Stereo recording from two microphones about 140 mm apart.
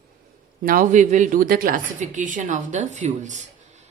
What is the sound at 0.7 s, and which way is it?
Speech, 75° right (ahead or behind).